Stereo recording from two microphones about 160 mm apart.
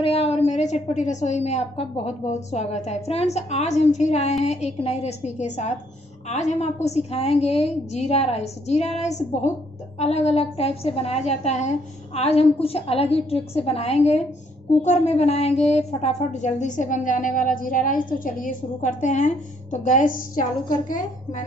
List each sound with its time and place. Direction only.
0.0 s a woman's voice: 35° left (ahead or behind)